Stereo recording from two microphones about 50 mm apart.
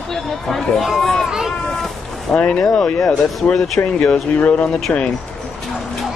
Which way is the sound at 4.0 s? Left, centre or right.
Left.